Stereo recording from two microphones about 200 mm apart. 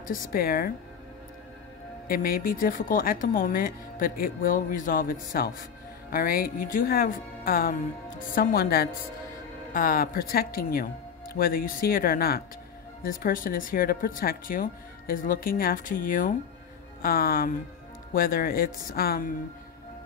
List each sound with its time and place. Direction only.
0.0 s speech: 45° left (ahead or behind)
2.0 s speech: 45° left (ahead or behind)